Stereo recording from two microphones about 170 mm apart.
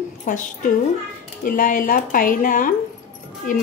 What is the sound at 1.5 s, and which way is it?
Speech, 55° left (ahead or behind).